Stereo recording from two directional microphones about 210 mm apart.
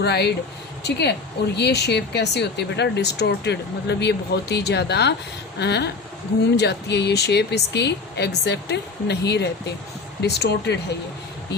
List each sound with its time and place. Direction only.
0.0 s speech: 50° left (ahead or behind)